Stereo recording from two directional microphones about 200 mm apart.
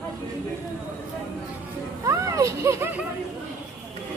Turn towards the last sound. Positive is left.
turn(degrees=-15)  # may be behind; listen again after turning